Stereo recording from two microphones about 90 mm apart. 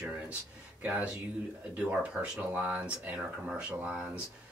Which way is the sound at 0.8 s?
15° right (ahead or behind).